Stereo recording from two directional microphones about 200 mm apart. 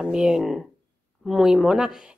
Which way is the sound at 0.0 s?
5° right (ahead or behind).